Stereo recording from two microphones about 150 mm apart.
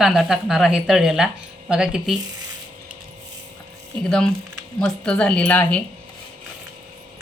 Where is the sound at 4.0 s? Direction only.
5° left (ahead or behind).